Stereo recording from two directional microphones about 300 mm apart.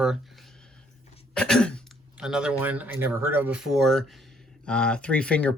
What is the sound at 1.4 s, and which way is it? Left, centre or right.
Speech, centre.